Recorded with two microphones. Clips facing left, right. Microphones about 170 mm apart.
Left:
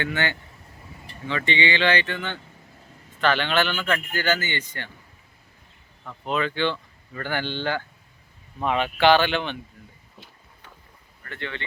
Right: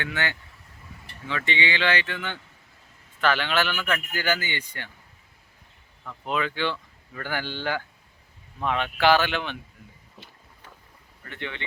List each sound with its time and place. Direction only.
0.0 s speech: centre (ahead or behind)
6.2 s speech: 5° right (ahead or behind)
8.5 s speech: 5° left (ahead or behind)
11.3 s speech: 15° right (ahead or behind)